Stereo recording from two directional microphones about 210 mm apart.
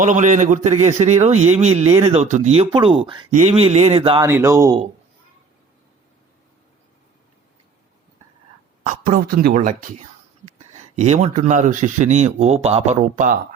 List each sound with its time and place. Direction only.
0.0 s speech: 35° right (ahead or behind)
4.3 s speech: 10° right (ahead or behind)
8.8 s speech: 35° right (ahead or behind)